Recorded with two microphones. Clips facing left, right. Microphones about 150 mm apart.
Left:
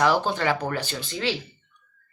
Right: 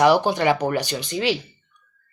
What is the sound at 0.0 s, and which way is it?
Speech, 15° right (ahead or behind).